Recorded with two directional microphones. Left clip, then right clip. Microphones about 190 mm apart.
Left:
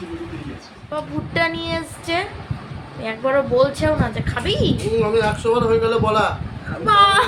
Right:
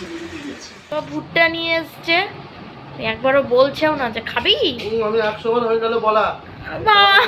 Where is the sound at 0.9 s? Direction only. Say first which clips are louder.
Right 4 dB; centre (ahead or behind).